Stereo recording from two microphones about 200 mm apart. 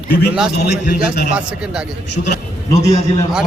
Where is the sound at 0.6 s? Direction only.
55° left (ahead or behind).